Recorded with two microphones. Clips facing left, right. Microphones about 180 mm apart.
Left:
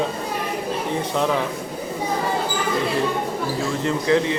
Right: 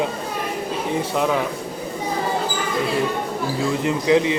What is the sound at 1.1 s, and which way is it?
Speech, 5° right (ahead or behind).